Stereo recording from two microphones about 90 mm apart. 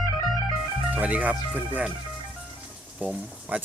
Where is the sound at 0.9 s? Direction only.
15° right (ahead or behind).